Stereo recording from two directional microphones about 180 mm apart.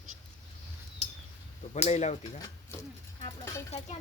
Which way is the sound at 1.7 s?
40° left (ahead or behind).